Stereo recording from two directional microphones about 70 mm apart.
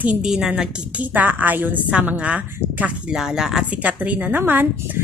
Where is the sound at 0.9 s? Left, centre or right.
Right; by 3.7 s centre.